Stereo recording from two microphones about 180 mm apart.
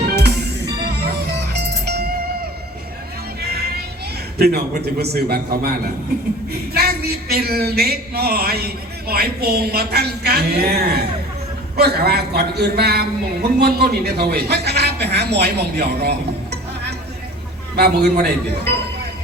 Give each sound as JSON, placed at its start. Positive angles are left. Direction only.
{"t": 0.0, "sound": "music", "side_deg": -65}
{"t": 3.4, "sound": "music", "side_deg": -60}
{"t": 4.4, "sound": "a man's voice", "side_deg": -60}
{"t": 17.7, "sound": "a man's voice", "side_deg": -60}